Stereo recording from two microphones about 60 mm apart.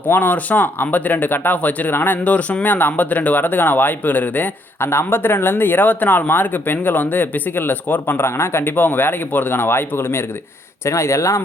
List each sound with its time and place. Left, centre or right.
0.0 s speech: left
2.2 s speech: left
4.9 s speech: left
10.8 s speech: left